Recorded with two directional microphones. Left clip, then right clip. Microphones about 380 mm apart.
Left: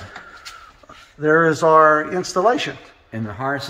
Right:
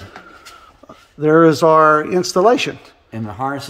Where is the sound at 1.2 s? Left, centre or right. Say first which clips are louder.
Right 4 dB; right.